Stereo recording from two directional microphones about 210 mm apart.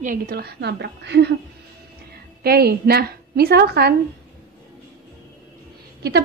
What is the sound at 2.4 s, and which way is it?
A woman's voice, 50° right (ahead or behind).